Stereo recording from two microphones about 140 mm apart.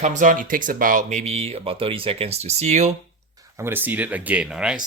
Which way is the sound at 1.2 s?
45° right (ahead or behind).